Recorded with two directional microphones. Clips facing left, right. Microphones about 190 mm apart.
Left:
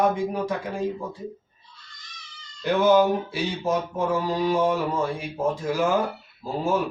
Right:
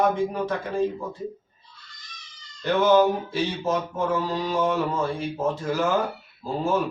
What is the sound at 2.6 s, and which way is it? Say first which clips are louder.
Mantra: even; 10° left (ahead or behind).